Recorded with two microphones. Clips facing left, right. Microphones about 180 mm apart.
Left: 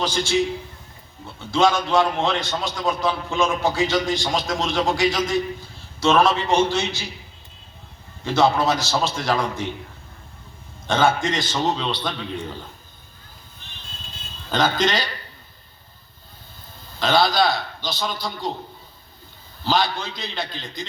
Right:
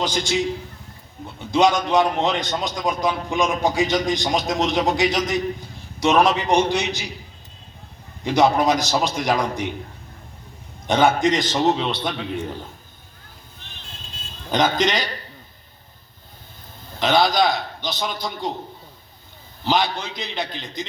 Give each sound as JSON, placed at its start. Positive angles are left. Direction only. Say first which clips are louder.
{"t": 0.0, "sound": "a man's voice", "louder": "even", "side_deg": -20}
{"t": 1.5, "sound": "a man's voice", "louder": "right 1 dB", "side_deg": -20}
{"t": 8.2, "sound": "a man's voice", "louder": "right 1 dB", "side_deg": -15}
{"t": 10.8, "sound": "a man's voice", "louder": "right 3 dB", "side_deg": -20}
{"t": 14.5, "sound": "a man's voice", "louder": "right 1 dB", "side_deg": -20}
{"t": 17.0, "sound": "a man's voice", "louder": "right 1 dB", "side_deg": -20}
{"t": 19.6, "sound": "a man's voice", "louder": "right 1 dB", "side_deg": -20}